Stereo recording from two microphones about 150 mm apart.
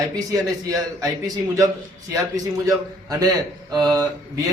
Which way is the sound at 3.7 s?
25° right (ahead or behind).